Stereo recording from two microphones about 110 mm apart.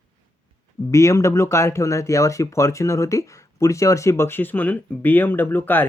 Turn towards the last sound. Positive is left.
turn(degrees=20)  # may be behind; listen again after turning